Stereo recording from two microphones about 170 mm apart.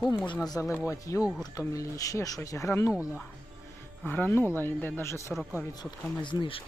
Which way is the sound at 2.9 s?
5° right (ahead or behind).